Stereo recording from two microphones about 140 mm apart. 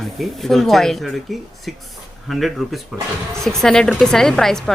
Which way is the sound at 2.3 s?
Centre (ahead or behind).